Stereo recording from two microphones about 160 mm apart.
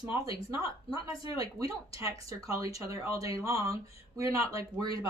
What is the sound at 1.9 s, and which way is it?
Speech, 20° right (ahead or behind).